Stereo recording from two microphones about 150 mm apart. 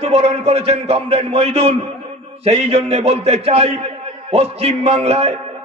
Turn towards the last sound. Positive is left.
turn(degrees=-40)  # may be behind; listen again after turning